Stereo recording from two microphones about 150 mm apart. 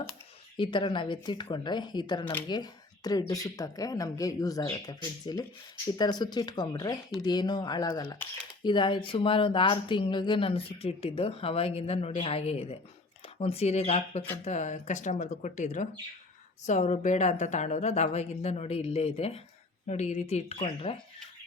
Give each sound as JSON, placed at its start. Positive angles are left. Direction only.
{"t": 0.5, "sound": "a woman's voice", "side_deg": 30}